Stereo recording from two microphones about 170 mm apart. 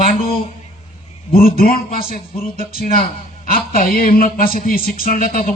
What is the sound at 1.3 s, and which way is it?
Speech, 60° left (ahead or behind).